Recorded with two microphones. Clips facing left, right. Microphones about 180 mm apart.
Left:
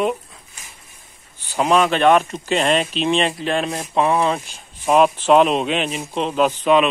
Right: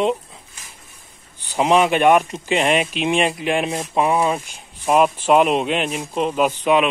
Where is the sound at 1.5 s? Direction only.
15° right (ahead or behind).